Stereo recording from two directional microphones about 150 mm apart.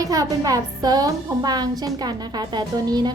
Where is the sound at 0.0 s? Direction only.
25° right (ahead or behind).